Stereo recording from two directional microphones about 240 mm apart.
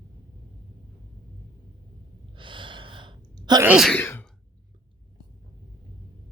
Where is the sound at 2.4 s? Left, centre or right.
Right.